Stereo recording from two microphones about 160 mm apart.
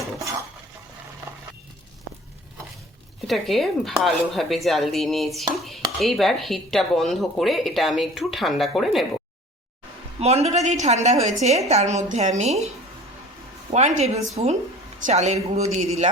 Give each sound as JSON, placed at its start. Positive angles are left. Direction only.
{"t": 3.2, "sound": "speech", "side_deg": 0}
{"t": 10.2, "sound": "a woman's voice", "side_deg": -40}